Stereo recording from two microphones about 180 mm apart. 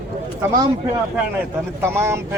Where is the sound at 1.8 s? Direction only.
15° right (ahead or behind).